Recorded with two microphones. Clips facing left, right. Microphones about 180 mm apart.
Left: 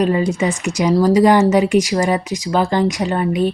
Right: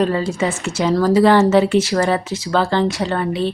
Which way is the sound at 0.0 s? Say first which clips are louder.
Left 2 dB; 15° left (ahead or behind).